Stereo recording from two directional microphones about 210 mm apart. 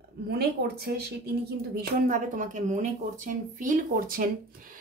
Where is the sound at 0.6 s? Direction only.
55° right (ahead or behind).